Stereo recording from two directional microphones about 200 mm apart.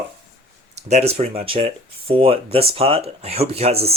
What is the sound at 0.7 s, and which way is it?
Speech, 35° right (ahead or behind).